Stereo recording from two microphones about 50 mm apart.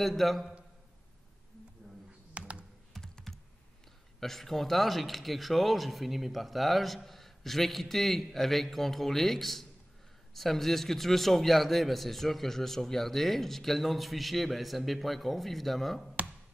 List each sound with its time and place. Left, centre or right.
0.0 s a man's voice: centre
2.3 s computer keyboard: right
2.9 s computer keyboard: centre
4.2 s a man's voice: centre